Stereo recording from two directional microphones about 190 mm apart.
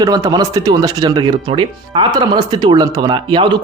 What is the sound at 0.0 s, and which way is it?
Speech, 20° right (ahead or behind).